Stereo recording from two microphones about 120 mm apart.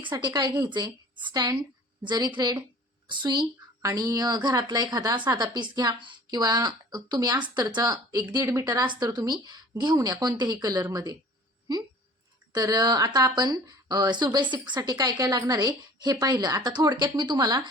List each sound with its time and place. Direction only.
0.1 s a woman's voice: 40° right (ahead or behind)
12.5 s a woman's voice: 35° right (ahead or behind)